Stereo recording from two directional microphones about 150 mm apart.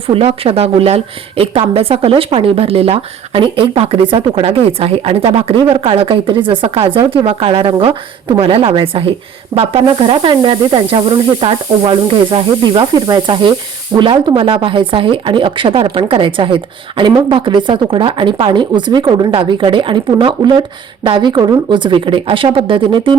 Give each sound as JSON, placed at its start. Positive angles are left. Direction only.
{"t": 0.1, "sound": "a woman's voice", "side_deg": -40}